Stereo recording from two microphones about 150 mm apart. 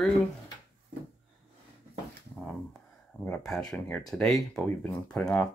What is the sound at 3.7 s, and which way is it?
Speech, 15° left (ahead or behind).